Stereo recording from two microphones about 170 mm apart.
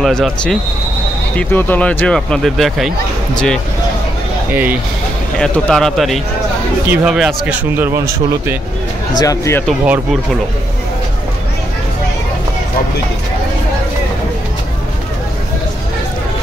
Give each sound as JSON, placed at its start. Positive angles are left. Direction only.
{"t": 0.0, "sound": "speech", "side_deg": 5}
{"t": 5.4, "sound": "speech", "side_deg": 5}
{"t": 9.2, "sound": "speech", "side_deg": 20}